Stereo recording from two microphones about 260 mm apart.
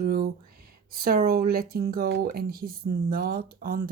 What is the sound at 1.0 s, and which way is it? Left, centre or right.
Speech, right.